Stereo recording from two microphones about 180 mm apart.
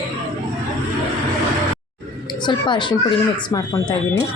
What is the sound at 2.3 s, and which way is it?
A woman's voice, 25° left (ahead or behind).